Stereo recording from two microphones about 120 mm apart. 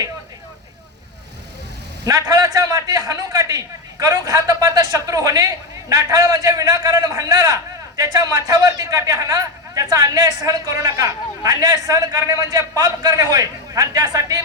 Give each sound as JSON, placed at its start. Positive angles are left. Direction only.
{"t": 2.0, "sound": "a man's voice", "side_deg": -30}